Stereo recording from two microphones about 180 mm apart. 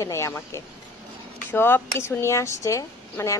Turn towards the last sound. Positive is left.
turn(degrees=15)  # may be behind; listen again after turning